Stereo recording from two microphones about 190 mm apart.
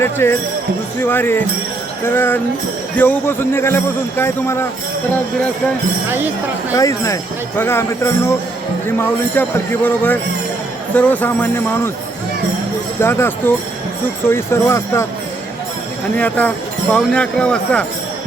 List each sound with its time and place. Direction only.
0.0 s a man's voice: 10° left (ahead or behind)
6.1 s speech: 10° right (ahead or behind)
6.7 s a man's voice: 15° left (ahead or behind)
13.0 s a man's voice: 15° left (ahead or behind)
16.1 s a man's voice: 10° left (ahead or behind)